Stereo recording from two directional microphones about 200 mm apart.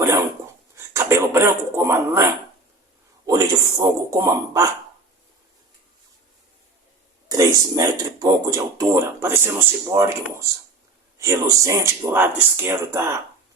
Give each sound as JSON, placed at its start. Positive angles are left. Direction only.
{"t": 0.8, "sound": "speech", "side_deg": -10}
{"t": 7.3, "sound": "speech", "side_deg": -20}